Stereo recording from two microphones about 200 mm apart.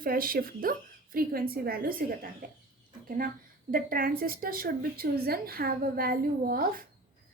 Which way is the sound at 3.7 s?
45° right (ahead or behind).